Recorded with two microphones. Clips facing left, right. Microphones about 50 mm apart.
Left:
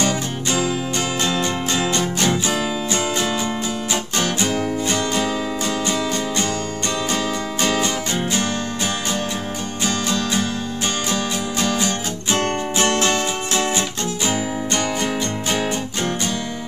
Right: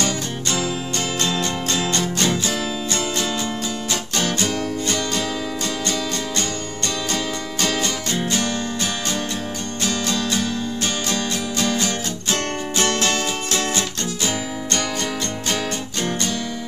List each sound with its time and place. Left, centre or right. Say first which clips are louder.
0.0 s music: left 2 dB; centre
7.6 s music: left 2 dB; centre
10.1 s music: left 1 dB; centre